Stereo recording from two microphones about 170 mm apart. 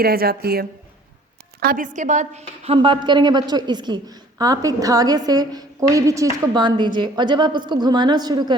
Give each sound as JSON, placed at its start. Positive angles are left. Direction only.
{"t": 0.0, "sound": "a woman's voice", "side_deg": -60}
{"t": 1.6, "sound": "a woman's voice", "side_deg": -50}
{"t": 2.7, "sound": "a woman's voice", "side_deg": -30}